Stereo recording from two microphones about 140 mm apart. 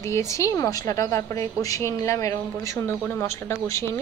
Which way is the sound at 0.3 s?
20° left (ahead or behind).